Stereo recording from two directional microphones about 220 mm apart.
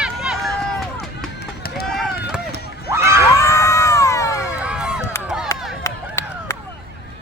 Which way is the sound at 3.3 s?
15° left (ahead or behind).